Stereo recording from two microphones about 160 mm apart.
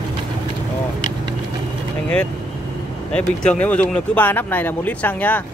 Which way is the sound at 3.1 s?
5° left (ahead or behind).